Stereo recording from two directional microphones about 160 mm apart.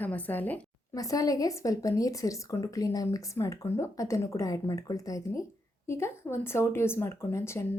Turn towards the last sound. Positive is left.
turn(degrees=15)  # may be behind; listen again after turning